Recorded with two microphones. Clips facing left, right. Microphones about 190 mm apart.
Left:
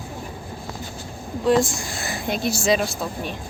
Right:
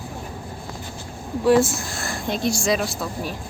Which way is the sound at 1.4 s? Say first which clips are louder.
Right 2 dB; 5° right (ahead or behind).